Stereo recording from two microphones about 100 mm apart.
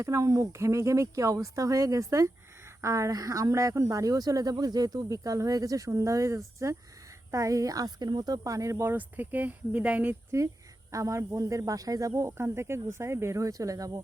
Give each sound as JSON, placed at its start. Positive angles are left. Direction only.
{"t": 0.0, "sound": "speech", "side_deg": -30}
{"t": 10.9, "sound": "speech", "side_deg": -30}